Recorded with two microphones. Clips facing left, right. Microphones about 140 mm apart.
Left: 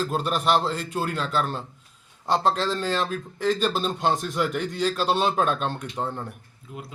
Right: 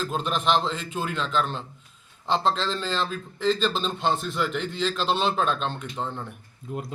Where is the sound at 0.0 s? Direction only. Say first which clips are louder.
Left 2 dB; 5° left (ahead or behind).